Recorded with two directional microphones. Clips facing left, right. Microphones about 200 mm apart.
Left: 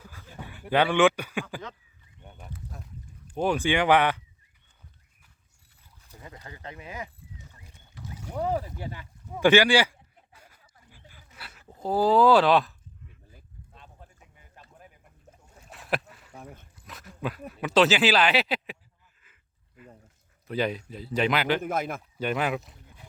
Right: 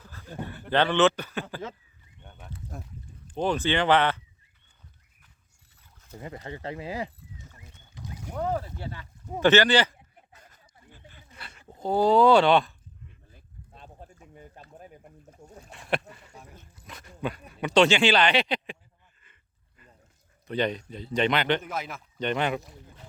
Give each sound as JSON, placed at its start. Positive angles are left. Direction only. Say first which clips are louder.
{"t": 0.0, "sound": "a sound", "louder": "even", "side_deg": 10}
{"t": 0.4, "sound": "speech", "louder": "left 1 dB", "side_deg": 10}
{"t": 3.2, "sound": "speech", "louder": "left 1 dB", "side_deg": 10}
{"t": 6.4, "sound": "speech", "louder": "right 7 dB", "side_deg": -30}
{"t": 7.9, "sound": "boat", "louder": "right 1 dB", "side_deg": -15}
{"t": 8.3, "sound": "a sound", "louder": "left 1 dB", "side_deg": 10}
{"t": 15.3, "sound": "a sound", "louder": "right 3 dB", "side_deg": 0}
{"t": 16.3, "sound": "dog", "louder": "left 4 dB", "side_deg": 55}
{"t": 16.7, "sound": "dog", "louder": "even", "side_deg": 0}
{"t": 17.5, "sound": "speech", "louder": "right 1 dB", "side_deg": 0}
{"t": 19.2, "sound": "a sound", "louder": "right 1 dB", "side_deg": 5}
{"t": 20.5, "sound": "speech", "louder": "right 1 dB", "side_deg": 5}
{"t": 21.6, "sound": "speech", "louder": "left 5 dB", "side_deg": 50}
{"t": 22.2, "sound": "speech", "louder": "right 1 dB", "side_deg": 5}